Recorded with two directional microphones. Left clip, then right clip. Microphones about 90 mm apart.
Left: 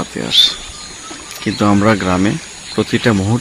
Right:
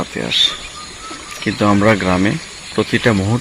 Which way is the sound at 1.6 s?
40° left (ahead or behind).